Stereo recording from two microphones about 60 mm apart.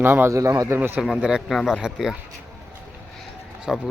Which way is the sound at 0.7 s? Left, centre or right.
Right.